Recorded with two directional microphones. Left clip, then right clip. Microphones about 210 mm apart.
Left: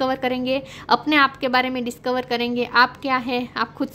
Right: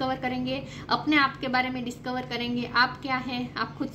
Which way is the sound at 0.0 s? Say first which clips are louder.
Left 7 dB; 55° left (ahead or behind).